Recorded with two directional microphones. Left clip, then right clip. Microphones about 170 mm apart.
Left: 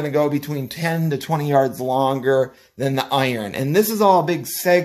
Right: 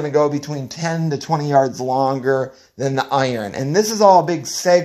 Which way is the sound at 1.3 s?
Centre (ahead or behind).